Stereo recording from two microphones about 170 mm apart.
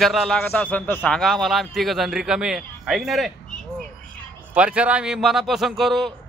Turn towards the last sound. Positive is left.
turn(degrees=0)  # may be behind; listen again after turning